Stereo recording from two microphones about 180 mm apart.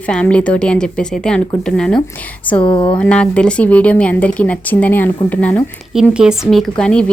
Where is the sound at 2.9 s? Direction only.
5° left (ahead or behind).